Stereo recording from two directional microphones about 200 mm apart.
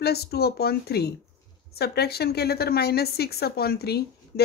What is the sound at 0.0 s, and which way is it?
A woman's voice, 50° left (ahead or behind).